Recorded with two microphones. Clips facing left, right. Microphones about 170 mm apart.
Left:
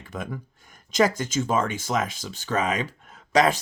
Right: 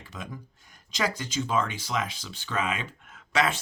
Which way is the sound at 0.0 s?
55° left (ahead or behind).